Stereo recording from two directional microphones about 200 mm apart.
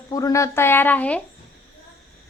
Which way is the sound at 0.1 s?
15° left (ahead or behind).